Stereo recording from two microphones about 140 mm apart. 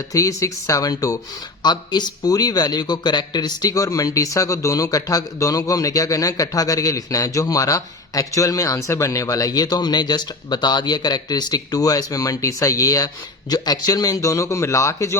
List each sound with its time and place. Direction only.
0.1 s a man's voice: 25° left (ahead or behind)